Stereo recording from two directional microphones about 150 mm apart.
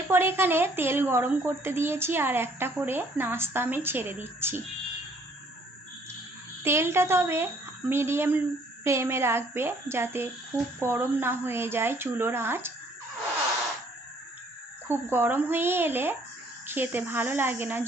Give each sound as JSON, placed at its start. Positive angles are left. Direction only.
{"t": 0.1, "sound": "a woman's voice", "side_deg": -15}
{"t": 6.7, "sound": "a woman's voice", "side_deg": -15}
{"t": 14.8, "sound": "a woman's voice", "side_deg": -15}